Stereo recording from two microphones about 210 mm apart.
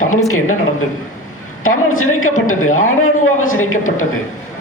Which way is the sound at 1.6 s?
80° left.